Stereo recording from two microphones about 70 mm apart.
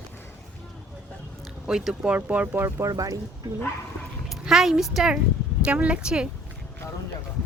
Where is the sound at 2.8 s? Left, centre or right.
Right.